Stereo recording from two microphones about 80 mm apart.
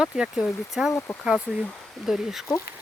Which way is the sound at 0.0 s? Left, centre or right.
Centre.